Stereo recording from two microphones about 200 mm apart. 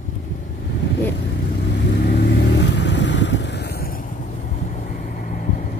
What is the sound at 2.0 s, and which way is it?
Vehicle, 50° left (ahead or behind).